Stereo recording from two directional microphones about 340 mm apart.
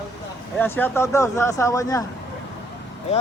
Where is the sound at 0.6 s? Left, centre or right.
Centre.